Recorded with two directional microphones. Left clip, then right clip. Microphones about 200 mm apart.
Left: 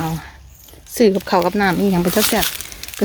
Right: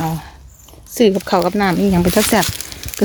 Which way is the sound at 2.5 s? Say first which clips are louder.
Even; 10° right (ahead or behind).